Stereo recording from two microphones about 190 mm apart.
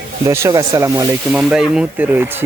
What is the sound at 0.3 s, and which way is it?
Speech, 15° right (ahead or behind).